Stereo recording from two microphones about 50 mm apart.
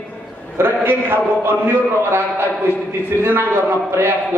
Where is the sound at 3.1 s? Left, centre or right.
Left.